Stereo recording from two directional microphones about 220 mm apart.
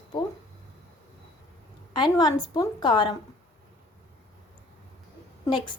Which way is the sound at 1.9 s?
20° left (ahead or behind).